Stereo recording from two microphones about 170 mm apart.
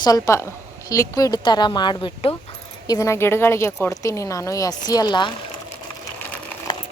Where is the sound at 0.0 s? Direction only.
20° left (ahead or behind).